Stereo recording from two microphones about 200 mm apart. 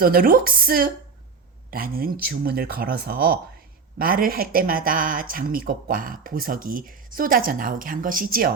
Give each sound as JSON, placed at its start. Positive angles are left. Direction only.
{"t": 0.0, "sound": "speech", "side_deg": -45}